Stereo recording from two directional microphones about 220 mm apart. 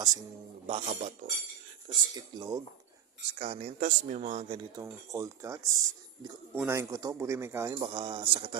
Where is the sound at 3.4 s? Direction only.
30° right (ahead or behind).